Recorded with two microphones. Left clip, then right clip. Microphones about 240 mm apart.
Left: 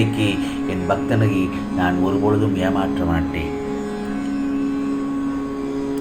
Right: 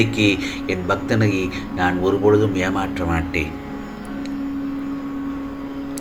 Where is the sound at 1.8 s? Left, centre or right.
Right.